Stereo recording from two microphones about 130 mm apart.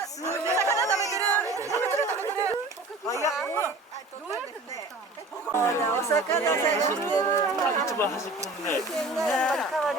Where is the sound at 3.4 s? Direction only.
15° left (ahead or behind).